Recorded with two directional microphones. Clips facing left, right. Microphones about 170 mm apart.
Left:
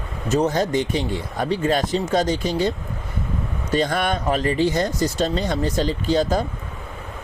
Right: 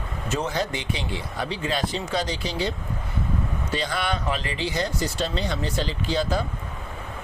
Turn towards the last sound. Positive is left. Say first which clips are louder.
# left 5 dB
turn(degrees=45)  # may be behind; listen again after turning